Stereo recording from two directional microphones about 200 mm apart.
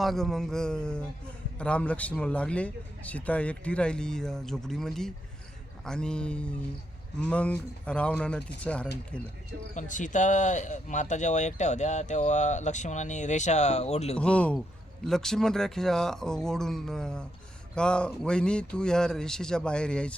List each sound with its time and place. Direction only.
0.0 s speech: centre (ahead or behind)
9.7 s speech: 40° left (ahead or behind)
14.2 s speech: 5° left (ahead or behind)